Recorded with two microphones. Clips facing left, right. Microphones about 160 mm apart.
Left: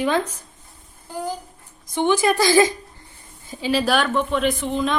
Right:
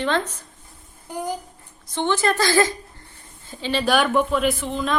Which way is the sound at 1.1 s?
15° right (ahead or behind).